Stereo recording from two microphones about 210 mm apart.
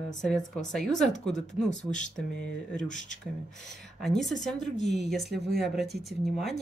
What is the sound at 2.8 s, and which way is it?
Speech, 35° left (ahead or behind).